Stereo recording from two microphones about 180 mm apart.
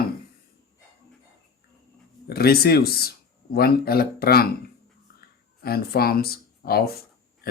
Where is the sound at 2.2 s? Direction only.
60° left (ahead or behind).